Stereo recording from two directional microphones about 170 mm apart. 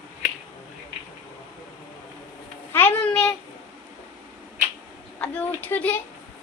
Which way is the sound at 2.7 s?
10° left (ahead or behind).